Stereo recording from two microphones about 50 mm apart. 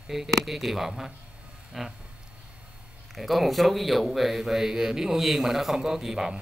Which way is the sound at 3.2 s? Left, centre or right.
Centre.